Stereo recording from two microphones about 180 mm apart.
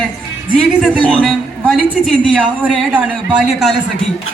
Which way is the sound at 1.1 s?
Centre (ahead or behind).